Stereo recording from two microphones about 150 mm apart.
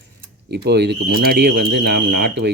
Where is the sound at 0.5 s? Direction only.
90° right.